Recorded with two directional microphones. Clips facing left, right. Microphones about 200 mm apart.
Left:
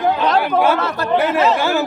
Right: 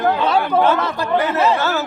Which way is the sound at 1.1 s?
10° left (ahead or behind).